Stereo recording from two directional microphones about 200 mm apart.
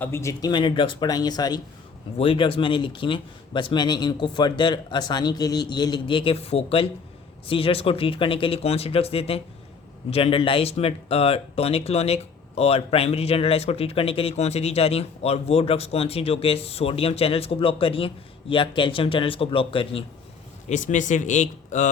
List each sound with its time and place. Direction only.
0.0 s speech: 15° left (ahead or behind)
20.7 s speech: 40° left (ahead or behind)